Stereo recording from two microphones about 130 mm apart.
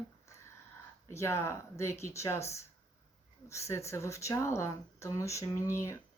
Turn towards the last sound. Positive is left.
turn(degrees=20)  # may be behind; listen again after turning